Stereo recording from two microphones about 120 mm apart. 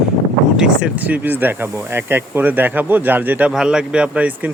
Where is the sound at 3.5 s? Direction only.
5° right (ahead or behind).